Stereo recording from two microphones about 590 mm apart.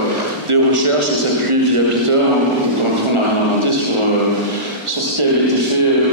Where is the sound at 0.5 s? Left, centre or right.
Right.